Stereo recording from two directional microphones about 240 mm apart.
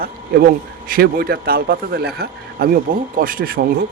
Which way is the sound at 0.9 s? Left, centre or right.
Right.